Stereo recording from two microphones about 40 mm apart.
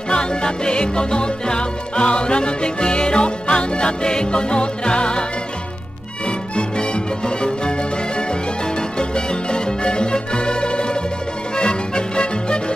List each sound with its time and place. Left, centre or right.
0.1 s music: left
6.2 s music: left
8.9 s music: left